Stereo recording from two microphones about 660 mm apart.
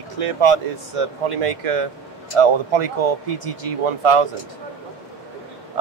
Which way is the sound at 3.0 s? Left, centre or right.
Right.